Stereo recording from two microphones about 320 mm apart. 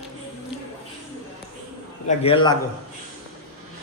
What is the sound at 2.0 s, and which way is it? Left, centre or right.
Speech, centre.